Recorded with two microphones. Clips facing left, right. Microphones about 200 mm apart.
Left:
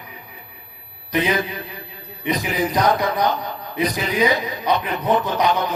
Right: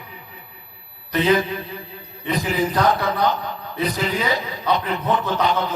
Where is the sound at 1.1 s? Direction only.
15° left (ahead or behind).